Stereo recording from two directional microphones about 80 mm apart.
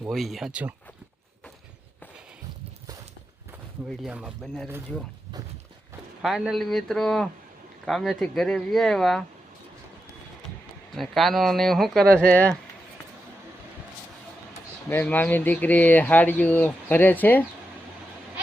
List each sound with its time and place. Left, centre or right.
0.1 s speech: centre
6.5 s speech: centre
10.9 s speech: centre
15.0 s speech: left